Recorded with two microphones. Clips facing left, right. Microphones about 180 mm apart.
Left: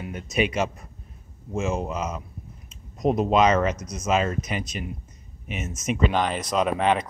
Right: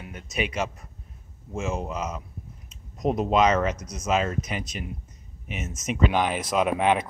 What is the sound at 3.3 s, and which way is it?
Speech, 25° left (ahead or behind).